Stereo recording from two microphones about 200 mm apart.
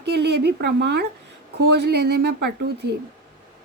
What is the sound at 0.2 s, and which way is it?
A woman's voice, 55° right (ahead or behind).